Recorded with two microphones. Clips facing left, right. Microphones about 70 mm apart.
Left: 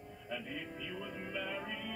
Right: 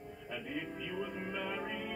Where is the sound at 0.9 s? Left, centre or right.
Centre.